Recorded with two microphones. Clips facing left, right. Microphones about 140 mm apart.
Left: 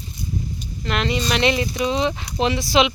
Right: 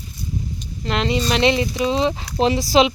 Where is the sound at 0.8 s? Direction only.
30° right (ahead or behind).